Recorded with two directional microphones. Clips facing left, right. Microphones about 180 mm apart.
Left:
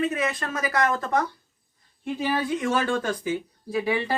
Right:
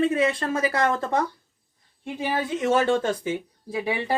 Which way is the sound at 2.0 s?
20° right (ahead or behind).